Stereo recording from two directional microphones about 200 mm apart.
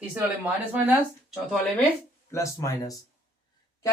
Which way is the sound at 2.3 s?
15° left (ahead or behind).